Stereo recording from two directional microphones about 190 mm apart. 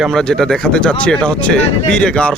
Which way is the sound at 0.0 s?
Centre (ahead or behind).